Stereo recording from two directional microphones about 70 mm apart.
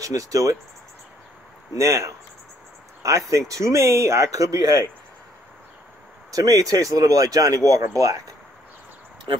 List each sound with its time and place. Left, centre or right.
0.0 s speech: right
1.7 s speech: right
6.3 s speech: right